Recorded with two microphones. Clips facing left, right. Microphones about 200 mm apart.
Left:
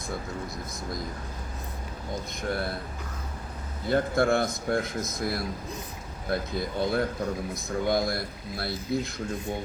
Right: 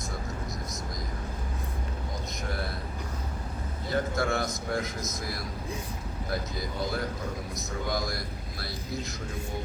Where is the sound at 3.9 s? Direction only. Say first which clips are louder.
Left 5 dB; 55° left (ahead or behind).